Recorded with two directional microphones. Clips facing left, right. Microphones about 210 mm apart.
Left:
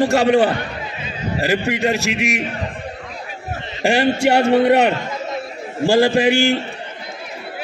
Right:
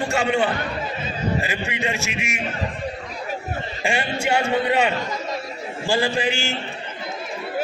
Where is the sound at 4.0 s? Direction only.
40° left (ahead or behind).